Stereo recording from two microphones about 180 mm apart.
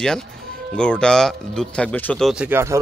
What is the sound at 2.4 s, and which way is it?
Speech, 15° right (ahead or behind).